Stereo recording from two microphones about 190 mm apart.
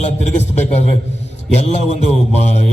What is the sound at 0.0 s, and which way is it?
A man's voice, 35° left (ahead or behind).